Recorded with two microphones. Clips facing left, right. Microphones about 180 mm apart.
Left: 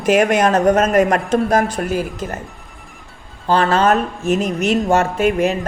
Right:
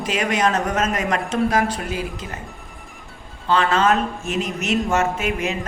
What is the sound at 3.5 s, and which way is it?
Speech, 40° left (ahead or behind).